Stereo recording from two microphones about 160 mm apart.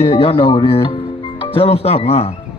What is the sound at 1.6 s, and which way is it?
Speech, 40° left (ahead or behind).